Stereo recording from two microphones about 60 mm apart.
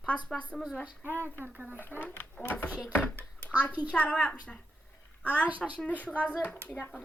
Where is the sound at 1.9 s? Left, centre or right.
Centre.